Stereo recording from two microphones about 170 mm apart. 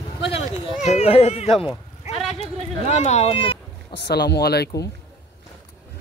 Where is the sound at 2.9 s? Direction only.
40° left (ahead or behind).